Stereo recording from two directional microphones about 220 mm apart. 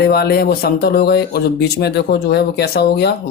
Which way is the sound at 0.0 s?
45° left (ahead or behind).